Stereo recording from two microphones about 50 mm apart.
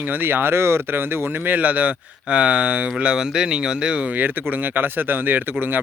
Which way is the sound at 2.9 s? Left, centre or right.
Centre.